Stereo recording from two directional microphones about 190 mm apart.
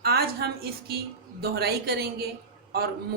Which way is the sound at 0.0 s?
55° right (ahead or behind).